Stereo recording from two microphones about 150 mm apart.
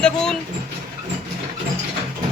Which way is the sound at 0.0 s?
5° left (ahead or behind).